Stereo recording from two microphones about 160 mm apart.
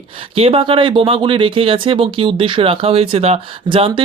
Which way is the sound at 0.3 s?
35° right (ahead or behind).